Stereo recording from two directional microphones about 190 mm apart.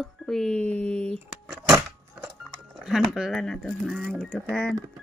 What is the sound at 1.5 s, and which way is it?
Keys jangling, 5° right (ahead or behind).